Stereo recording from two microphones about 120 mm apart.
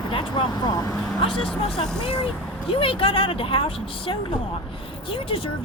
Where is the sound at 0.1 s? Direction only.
45° left (ahead or behind).